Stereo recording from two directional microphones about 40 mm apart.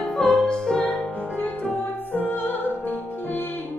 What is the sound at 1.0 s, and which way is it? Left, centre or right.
Music, left.